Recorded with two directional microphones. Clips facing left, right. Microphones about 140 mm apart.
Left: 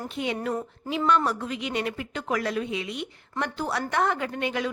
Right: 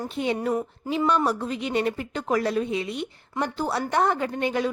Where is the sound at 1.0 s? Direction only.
10° right (ahead or behind).